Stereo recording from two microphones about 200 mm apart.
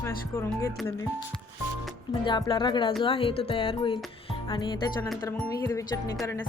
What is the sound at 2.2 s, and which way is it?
Speech, 25° left (ahead or behind).